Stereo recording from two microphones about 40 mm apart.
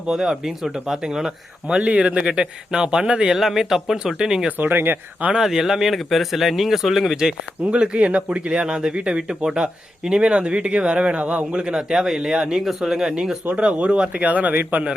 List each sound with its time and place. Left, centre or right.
0.1 s speech: centre
1.6 s speech: right
3.3 s speech: centre
4.5 s speech: right
5.4 s speech: centre
7.6 s speech: right
9.3 s speech: centre
13.6 s speech: right